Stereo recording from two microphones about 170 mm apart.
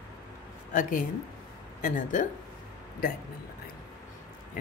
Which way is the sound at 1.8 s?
50° left (ahead or behind).